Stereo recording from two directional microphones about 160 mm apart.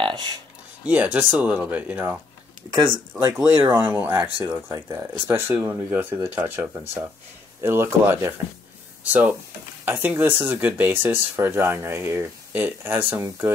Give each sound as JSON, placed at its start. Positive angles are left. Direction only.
{"t": 0.0, "sound": "a sound", "side_deg": -30}
{"t": 0.8, "sound": "speech", "side_deg": -10}
{"t": 2.7, "sound": "speech", "side_deg": -30}
{"t": 3.3, "sound": "speech", "side_deg": -10}
{"t": 4.2, "sound": "speech", "side_deg": -30}
{"t": 4.6, "sound": "speech", "side_deg": -20}
{"t": 9.8, "sound": "speech", "side_deg": -15}